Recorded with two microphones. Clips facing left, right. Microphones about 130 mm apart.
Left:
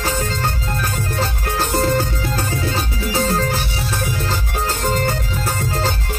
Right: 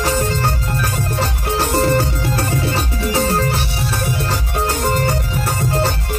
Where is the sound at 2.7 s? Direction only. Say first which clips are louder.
Right 2 dB; 70° right (ahead or behind).